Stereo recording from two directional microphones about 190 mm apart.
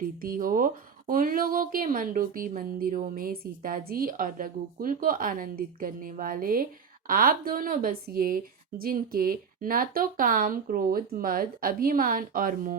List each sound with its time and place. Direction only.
0.0 s speech: 50° right (ahead or behind)